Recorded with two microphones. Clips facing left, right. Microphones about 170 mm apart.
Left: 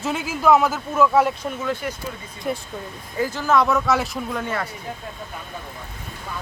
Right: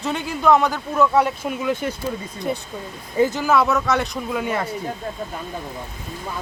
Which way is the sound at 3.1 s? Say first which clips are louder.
Right 6 dB; 25° right (ahead or behind).